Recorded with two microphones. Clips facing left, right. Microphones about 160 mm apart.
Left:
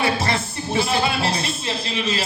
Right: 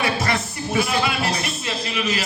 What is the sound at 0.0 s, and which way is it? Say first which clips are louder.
Music: left 1 dB; 30° left (ahead or behind).